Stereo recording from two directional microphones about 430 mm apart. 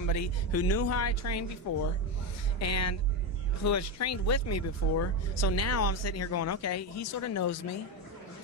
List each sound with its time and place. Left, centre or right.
0.0 s speech: left